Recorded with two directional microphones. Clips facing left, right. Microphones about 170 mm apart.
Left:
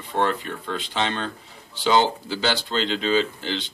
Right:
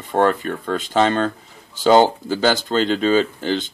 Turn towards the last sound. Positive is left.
turn(degrees=-45)  # may be behind; listen again after turning